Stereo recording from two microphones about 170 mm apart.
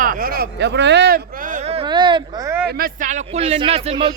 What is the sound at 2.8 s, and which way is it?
Speech, 50° right (ahead or behind).